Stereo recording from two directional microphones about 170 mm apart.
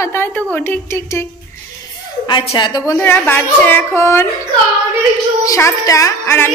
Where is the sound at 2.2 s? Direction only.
25° left (ahead or behind).